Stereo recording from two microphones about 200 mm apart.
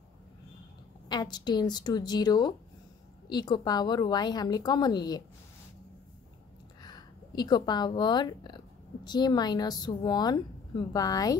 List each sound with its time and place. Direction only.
1.0 s a woman's voice: 20° left (ahead or behind)
6.8 s a woman's voice: 20° left (ahead or behind)